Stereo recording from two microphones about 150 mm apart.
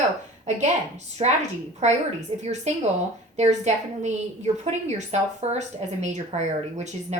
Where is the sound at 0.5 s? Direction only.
50° right (ahead or behind).